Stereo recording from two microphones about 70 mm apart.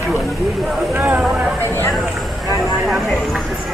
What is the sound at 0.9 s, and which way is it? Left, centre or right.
Speech, right.